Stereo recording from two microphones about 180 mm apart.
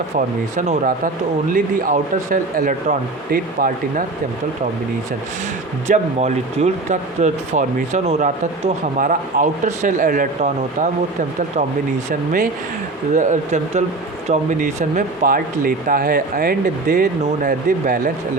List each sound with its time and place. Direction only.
0.5 s speech: 45° right (ahead or behind)
5.9 s speech: 40° right (ahead or behind)
13.1 s speech: 40° right (ahead or behind)